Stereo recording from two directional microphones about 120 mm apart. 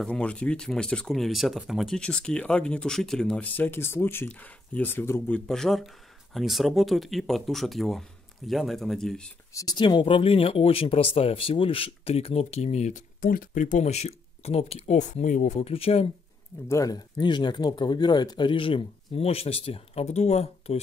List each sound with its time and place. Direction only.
0.0 s speech: 10° left (ahead or behind)
5.5 s speech: 5° left (ahead or behind)
9.5 s speech: 30° left (ahead or behind)
9.8 s speech: 40° left (ahead or behind); by 13.0 s 75° left (ahead or behind)
13.6 s speech: 90° left; by 16.1 s 55° left (ahead or behind)
16.6 s speech: 25° left (ahead or behind); by 20.8 s 60° left (ahead or behind)